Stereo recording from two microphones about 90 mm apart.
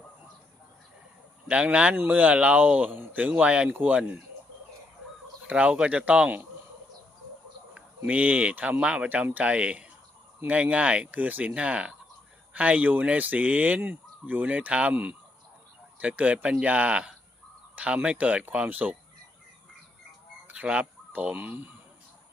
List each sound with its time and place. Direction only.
1.5 s speech: 15° right (ahead or behind)
5.5 s speech: 15° right (ahead or behind)
7.7 s speech: 15° right (ahead or behind)
20.5 s speech: 15° right (ahead or behind)